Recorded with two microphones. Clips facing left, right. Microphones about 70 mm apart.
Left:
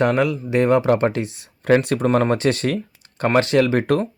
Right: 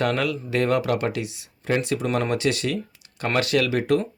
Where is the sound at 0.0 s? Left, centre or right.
Left.